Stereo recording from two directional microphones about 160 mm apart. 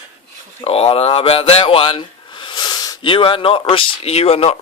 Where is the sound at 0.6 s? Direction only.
40° left (ahead or behind).